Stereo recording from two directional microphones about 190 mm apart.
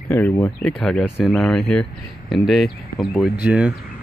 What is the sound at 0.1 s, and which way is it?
Speech, 10° left (ahead or behind).